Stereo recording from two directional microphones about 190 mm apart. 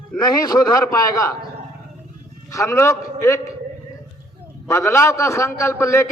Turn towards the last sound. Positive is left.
turn(degrees=15)  # may be behind; listen again after turning